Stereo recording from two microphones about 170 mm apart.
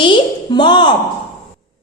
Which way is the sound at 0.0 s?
30° left (ahead or behind).